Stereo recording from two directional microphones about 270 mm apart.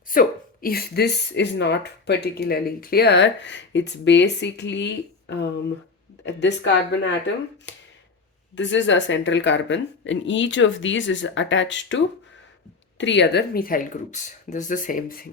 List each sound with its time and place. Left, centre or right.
0.1 s a woman's voice: left
8.5 s a woman's voice: left